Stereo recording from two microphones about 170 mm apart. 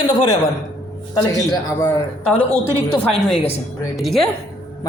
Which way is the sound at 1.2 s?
20° left (ahead or behind).